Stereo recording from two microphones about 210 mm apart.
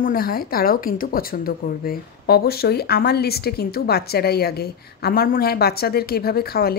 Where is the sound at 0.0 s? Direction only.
45° left (ahead or behind).